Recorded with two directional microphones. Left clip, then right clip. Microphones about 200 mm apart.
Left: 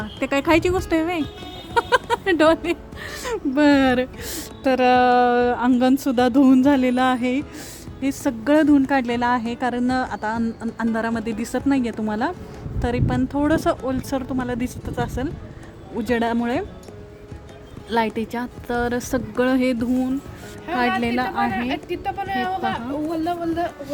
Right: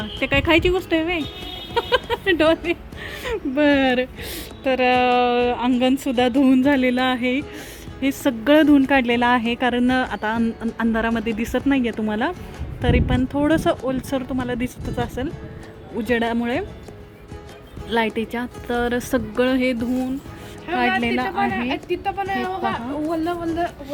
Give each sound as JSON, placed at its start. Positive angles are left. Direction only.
{"t": 0.0, "sound": "speech", "side_deg": 0}
{"t": 4.6, "sound": "music", "side_deg": 15}
{"t": 8.0, "sound": "speech", "side_deg": -15}
{"t": 17.8, "sound": "speech", "side_deg": 0}
{"t": 20.7, "sound": "music", "side_deg": 5}
{"t": 21.6, "sound": "a woman's voice", "side_deg": 55}